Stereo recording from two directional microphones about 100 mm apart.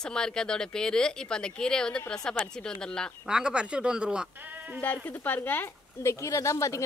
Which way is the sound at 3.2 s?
10° right (ahead or behind).